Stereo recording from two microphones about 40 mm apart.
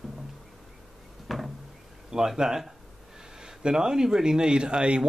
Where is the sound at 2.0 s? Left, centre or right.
Centre.